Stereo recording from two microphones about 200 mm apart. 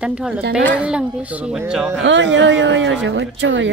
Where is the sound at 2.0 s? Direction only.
65° right (ahead or behind).